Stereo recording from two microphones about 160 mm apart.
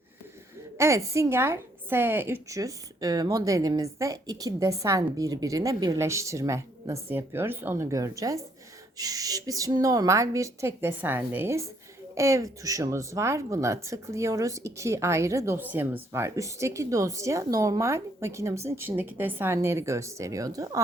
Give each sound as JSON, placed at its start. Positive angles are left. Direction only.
{"t": 0.8, "sound": "speech", "side_deg": -20}